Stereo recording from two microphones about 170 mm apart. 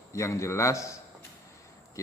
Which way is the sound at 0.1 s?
15° left (ahead or behind).